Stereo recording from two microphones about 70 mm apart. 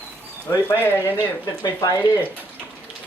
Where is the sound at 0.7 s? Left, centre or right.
Left.